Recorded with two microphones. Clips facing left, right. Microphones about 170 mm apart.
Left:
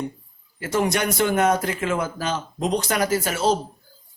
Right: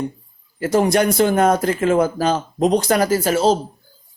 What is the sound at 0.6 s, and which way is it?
A man's voice, 35° right (ahead or behind).